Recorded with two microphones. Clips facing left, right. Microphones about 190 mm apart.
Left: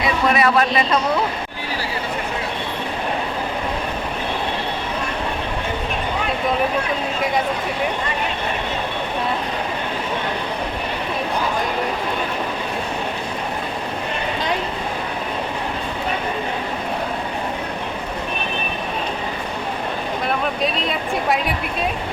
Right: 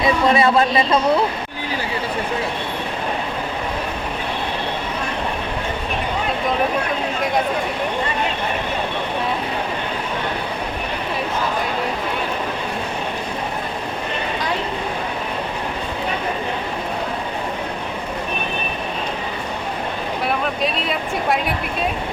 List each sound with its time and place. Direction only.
0.0 s a man's voice: 25° right (ahead or behind)
20.2 s speech: centre (ahead or behind)